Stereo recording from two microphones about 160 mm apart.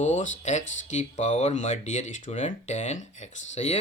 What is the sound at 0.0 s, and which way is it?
Speech, 50° left (ahead or behind).